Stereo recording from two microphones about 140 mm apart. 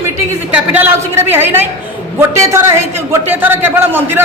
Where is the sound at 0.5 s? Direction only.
10° right (ahead or behind).